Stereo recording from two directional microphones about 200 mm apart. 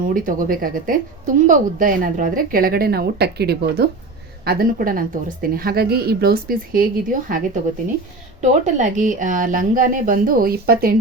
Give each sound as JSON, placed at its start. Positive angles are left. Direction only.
{"t": 0.1, "sound": "a woman's voice", "side_deg": -45}